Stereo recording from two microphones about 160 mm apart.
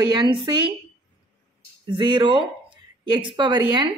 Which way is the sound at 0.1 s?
30° right (ahead or behind).